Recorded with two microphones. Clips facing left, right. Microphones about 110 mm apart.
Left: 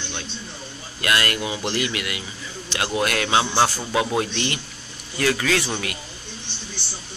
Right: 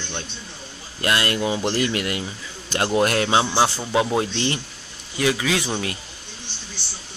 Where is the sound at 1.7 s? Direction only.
40° right (ahead or behind); by 5.9 s 20° right (ahead or behind).